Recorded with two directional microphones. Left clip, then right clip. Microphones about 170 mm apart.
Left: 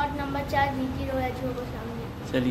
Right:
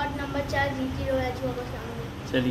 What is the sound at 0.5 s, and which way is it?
Speech, 15° left (ahead or behind).